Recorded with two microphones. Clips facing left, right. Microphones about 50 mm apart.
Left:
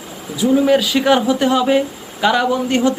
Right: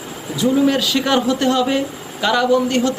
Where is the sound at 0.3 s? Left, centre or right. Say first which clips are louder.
Left 2 dB; centre.